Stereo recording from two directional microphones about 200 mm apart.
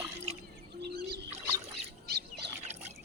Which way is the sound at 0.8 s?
50° right (ahead or behind).